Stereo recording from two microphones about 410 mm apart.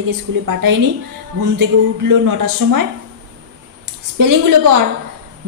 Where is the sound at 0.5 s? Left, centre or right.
Right.